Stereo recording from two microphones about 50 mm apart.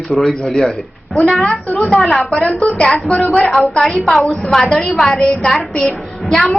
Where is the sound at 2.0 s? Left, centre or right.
Centre.